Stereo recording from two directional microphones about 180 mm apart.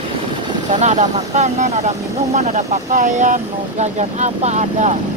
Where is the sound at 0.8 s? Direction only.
40° right (ahead or behind).